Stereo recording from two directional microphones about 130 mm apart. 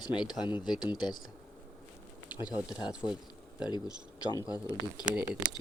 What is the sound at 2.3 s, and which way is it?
Speech, 35° left (ahead or behind).